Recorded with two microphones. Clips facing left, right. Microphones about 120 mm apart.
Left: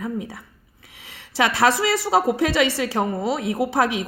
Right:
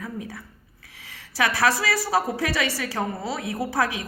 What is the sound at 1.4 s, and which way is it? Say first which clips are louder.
A woman's voice: left 4 dB; 20° left (ahead or behind).